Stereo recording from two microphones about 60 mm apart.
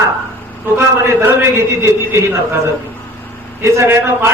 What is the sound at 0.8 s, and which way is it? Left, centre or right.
A man's voice, right.